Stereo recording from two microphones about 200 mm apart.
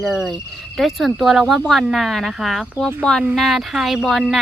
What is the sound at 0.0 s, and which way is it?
Speech, centre (ahead or behind).